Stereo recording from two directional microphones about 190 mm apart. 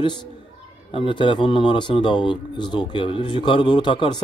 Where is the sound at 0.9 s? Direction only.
25° left (ahead or behind).